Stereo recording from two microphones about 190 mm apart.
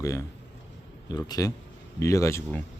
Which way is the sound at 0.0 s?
15° left (ahead or behind).